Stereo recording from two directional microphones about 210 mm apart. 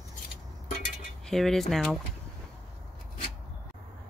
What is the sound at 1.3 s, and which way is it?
Speech, centre (ahead or behind).